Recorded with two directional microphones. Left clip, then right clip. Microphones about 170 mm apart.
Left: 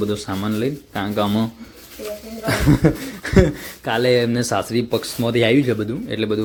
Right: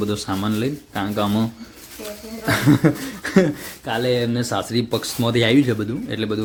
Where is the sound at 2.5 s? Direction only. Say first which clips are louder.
Even; centre (ahead or behind).